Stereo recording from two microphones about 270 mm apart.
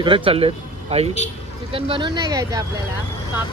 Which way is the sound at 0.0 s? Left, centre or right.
Centre.